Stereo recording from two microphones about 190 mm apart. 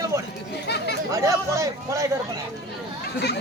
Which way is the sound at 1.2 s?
15° right (ahead or behind).